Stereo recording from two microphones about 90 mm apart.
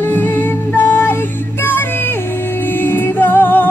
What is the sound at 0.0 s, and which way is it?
Music, 20° left (ahead or behind).